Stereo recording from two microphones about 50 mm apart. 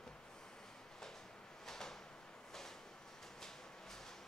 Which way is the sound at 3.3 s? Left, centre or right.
Centre.